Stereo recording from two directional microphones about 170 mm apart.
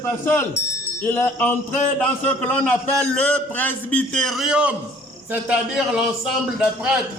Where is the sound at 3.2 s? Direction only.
10° left (ahead or behind).